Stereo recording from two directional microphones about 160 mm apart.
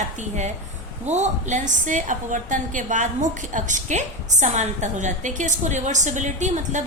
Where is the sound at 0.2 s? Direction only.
50° right (ahead or behind).